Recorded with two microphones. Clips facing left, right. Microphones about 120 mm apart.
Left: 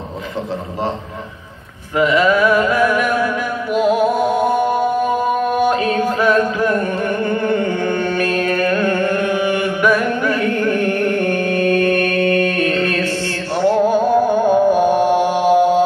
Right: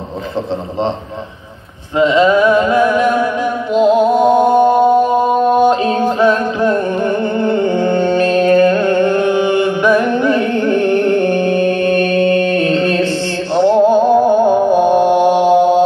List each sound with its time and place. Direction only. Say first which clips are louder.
2.0 s music: right 3 dB; 25° right (ahead or behind)